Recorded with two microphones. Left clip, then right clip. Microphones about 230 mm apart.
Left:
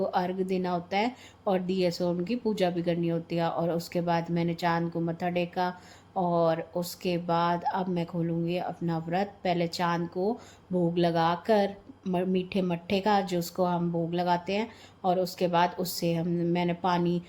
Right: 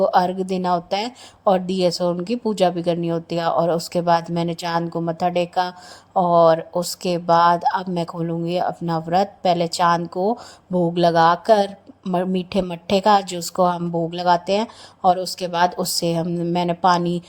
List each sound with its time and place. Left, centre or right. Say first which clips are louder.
0.0 s speech: right 11 dB; right